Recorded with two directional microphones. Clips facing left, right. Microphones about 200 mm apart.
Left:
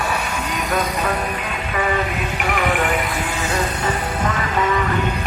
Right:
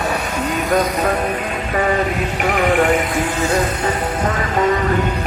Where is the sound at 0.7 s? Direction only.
45° right (ahead or behind).